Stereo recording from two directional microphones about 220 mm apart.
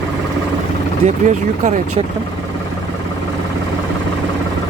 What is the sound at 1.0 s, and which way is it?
Speech, 30° right (ahead or behind).